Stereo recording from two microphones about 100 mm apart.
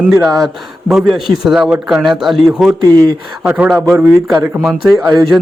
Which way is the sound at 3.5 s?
10° right (ahead or behind).